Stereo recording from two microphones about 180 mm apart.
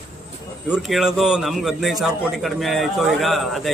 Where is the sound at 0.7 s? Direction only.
5° right (ahead or behind).